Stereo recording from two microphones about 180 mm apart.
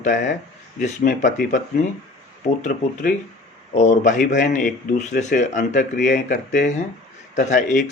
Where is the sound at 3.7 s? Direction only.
40° left (ahead or behind).